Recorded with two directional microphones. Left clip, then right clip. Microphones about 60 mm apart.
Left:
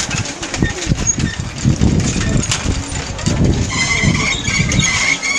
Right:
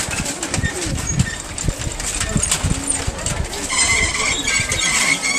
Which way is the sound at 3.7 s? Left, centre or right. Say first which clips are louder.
Right 1 dB; centre.